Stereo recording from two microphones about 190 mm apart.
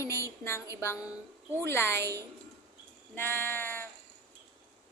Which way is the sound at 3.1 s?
10° left (ahead or behind).